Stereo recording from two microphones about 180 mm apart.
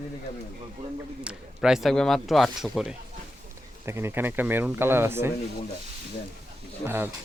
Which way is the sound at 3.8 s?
15° right (ahead or behind).